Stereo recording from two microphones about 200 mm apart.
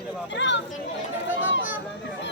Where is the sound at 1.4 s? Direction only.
70° left (ahead or behind).